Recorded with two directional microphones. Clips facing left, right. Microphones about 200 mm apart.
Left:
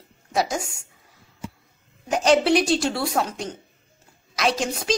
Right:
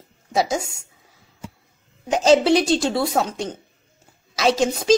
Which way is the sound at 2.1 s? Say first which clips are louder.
Right 3 dB; 25° right (ahead or behind).